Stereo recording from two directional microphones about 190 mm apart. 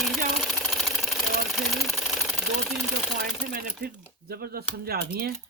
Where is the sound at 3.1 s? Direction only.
45° right (ahead or behind).